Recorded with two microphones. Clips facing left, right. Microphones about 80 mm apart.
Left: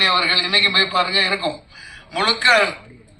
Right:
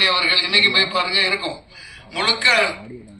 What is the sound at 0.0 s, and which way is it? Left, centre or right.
A man's voice, left.